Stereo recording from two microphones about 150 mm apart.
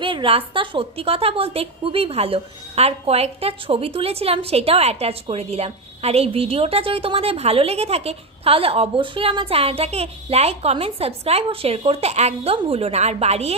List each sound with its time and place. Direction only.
0.0 s a woman's voice: 35° right (ahead or behind)